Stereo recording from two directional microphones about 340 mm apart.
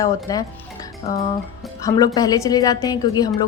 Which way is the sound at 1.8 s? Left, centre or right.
Centre.